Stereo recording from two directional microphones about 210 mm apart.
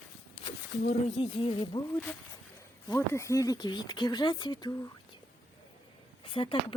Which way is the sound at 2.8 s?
15° left (ahead or behind).